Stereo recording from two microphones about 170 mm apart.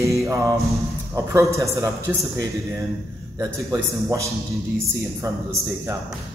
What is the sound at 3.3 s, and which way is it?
A man's voice, 15° right (ahead or behind).